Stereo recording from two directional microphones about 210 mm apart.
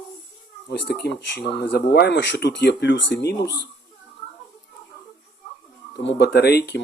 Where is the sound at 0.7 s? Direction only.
50° left (ahead or behind).